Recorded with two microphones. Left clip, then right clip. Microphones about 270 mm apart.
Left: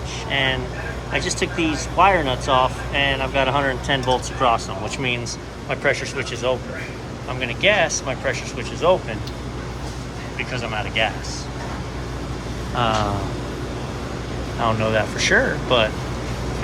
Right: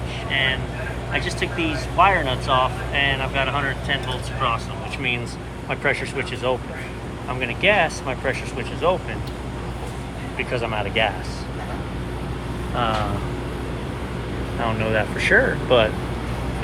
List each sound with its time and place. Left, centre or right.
1.1 s speech: centre
5.6 s speech: centre
10.5 s speech: centre
12.7 s speech: centre
14.6 s speech: centre